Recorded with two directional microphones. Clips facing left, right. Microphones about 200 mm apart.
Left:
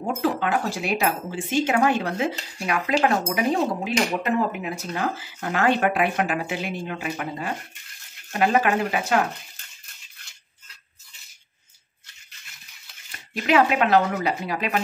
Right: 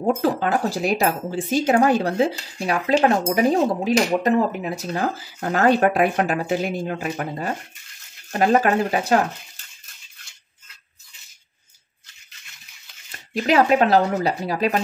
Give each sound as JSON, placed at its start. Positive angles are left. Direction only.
{"t": 0.0, "sound": "speech", "side_deg": -40}
{"t": 13.5, "sound": "speech", "side_deg": -40}